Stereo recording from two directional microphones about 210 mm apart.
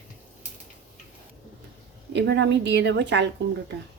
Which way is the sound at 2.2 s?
55° right (ahead or behind).